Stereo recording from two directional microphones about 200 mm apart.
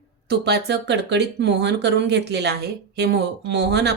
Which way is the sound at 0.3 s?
55° right (ahead or behind).